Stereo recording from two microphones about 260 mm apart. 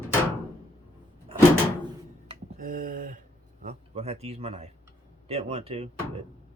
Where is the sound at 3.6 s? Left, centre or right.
Right.